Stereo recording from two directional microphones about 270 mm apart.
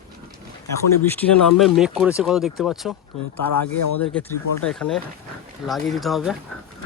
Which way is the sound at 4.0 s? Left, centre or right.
Centre.